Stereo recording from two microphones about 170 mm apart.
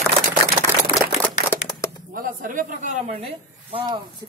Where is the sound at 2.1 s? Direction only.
55° right (ahead or behind).